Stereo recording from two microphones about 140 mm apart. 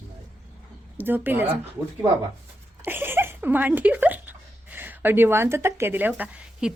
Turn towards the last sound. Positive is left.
turn(degrees=-5)  # may be behind; listen again after turning